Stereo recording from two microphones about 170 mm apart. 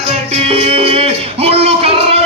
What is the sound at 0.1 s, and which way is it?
Music, 40° right (ahead or behind).